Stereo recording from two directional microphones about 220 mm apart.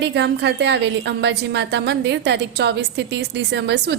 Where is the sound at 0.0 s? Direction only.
50° right (ahead or behind).